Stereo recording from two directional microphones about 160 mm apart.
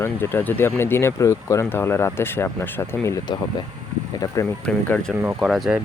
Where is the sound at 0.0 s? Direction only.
15° left (ahead or behind).